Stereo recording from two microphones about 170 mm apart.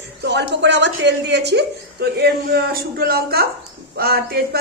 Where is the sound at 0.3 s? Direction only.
90° right.